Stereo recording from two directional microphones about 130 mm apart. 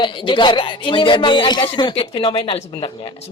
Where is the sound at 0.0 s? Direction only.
40° left (ahead or behind).